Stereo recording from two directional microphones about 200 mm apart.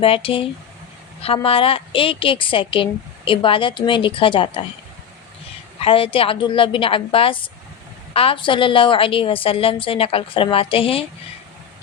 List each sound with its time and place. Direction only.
0.0 s a woman's voice: 25° left (ahead or behind)
5.8 s a woman's voice: 25° left (ahead or behind)